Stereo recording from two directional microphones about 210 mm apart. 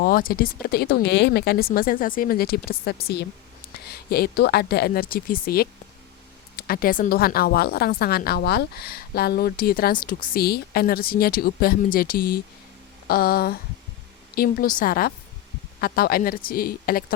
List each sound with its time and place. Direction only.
0.0 s a woman's voice: 45° left (ahead or behind)